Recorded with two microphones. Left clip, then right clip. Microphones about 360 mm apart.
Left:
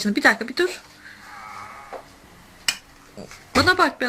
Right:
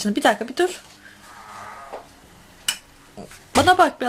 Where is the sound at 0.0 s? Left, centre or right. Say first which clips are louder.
Left 1 dB; centre.